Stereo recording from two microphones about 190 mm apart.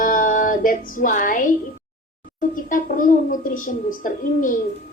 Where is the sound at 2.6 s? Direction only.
45° left (ahead or behind).